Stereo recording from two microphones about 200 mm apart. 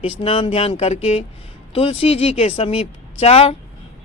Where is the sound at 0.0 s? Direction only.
25° left (ahead or behind).